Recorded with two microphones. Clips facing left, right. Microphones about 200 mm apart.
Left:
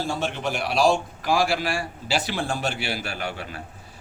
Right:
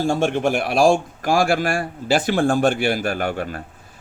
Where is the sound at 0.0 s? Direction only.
50° right (ahead or behind).